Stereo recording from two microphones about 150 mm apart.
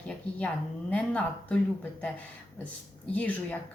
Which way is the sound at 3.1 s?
10° left (ahead or behind).